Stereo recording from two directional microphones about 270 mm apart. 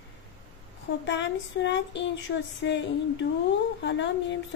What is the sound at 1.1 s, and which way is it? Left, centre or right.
Speech, left.